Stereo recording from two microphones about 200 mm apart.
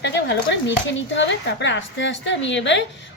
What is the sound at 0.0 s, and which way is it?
Speech, 60° left (ahead or behind).